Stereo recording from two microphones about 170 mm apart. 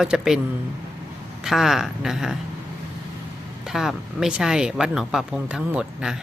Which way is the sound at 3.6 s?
Centre (ahead or behind).